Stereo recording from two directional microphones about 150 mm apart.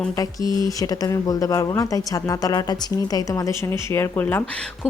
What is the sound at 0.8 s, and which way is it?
Speech, 25° left (ahead or behind).